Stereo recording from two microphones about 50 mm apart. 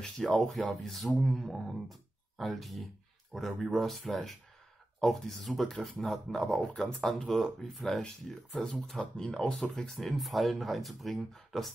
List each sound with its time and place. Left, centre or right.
0.0 s speech: centre
9.6 s speech: centre